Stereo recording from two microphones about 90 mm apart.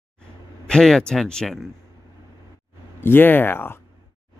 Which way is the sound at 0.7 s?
5° left (ahead or behind).